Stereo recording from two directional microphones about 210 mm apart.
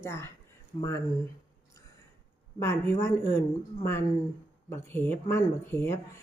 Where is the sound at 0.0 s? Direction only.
15° left (ahead or behind).